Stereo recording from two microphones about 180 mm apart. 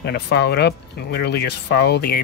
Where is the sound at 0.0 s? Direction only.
70° left (ahead or behind).